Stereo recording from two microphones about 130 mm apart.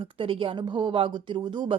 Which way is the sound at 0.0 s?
40° right (ahead or behind).